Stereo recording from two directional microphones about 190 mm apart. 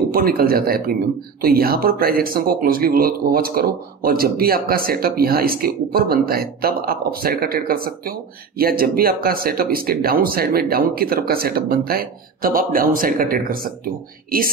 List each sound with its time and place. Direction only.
0.1 s speech: 50° right (ahead or behind)